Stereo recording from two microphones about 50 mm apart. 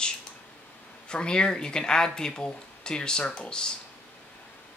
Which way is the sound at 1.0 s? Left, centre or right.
Centre.